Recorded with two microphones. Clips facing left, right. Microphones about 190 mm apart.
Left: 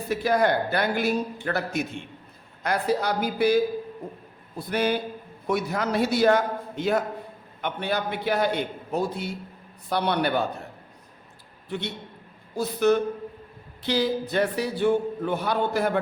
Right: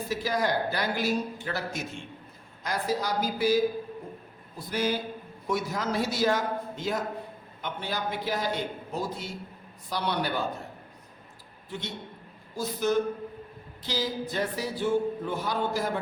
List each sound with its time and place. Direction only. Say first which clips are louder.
0.1 s speech: left 6 dB; 60° left (ahead or behind)
12.5 s speech: left 5 dB; 65° left (ahead or behind)